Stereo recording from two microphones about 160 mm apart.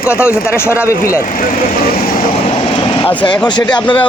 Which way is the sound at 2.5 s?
30° left (ahead or behind).